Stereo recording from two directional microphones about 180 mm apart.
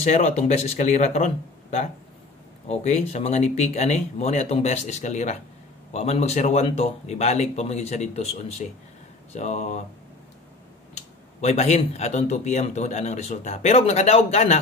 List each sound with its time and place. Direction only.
0.0 s speech: 40° left (ahead or behind)
11.0 s speech: 40° left (ahead or behind)